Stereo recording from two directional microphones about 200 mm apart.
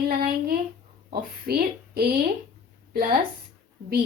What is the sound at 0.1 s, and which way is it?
A woman's voice, 50° right (ahead or behind).